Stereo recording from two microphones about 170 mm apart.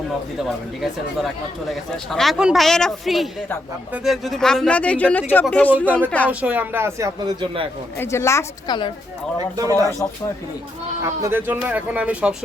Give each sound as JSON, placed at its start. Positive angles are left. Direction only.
{"t": 0.4, "sound": "a man's voice", "side_deg": 0}
{"t": 6.4, "sound": "speech", "side_deg": -10}
{"t": 7.9, "sound": "a man's voice", "side_deg": 15}
{"t": 9.6, "sound": "speech", "side_deg": -20}
{"t": 11.0, "sound": "speech", "side_deg": -15}